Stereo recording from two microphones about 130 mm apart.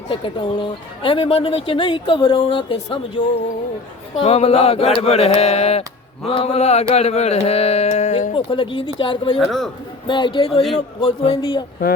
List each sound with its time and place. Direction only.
0.1 s speech: 40° left (ahead or behind)
4.1 s a sound: 50° left (ahead or behind)
6.9 s speech: 55° left (ahead or behind)
8.3 s speech: 45° left (ahead or behind)
9.4 s a man's voice: centre (ahead or behind)
10.1 s speech: 40° left (ahead or behind)